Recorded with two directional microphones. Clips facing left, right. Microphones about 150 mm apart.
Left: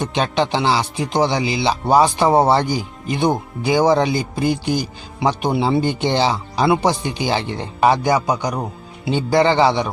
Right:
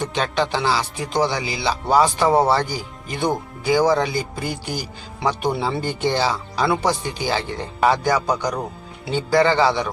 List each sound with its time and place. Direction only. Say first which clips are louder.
0.0 s speech: left 3 dB; 20° left (ahead or behind)